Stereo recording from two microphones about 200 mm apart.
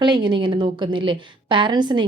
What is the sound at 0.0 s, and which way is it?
A woman's voice, 25° right (ahead or behind).